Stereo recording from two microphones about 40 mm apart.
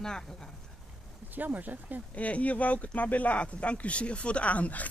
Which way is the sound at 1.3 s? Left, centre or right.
Right.